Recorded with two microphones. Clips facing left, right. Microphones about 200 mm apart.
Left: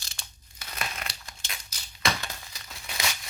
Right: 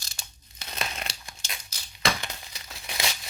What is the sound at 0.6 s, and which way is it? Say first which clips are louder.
Crumpling: right 2 dB; 25° right (ahead or behind).